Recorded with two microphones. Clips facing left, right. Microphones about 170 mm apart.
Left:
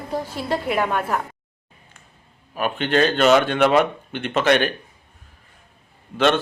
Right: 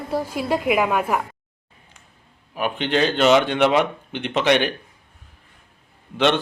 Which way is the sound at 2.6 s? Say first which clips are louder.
Left 1 dB; 15° right (ahead or behind).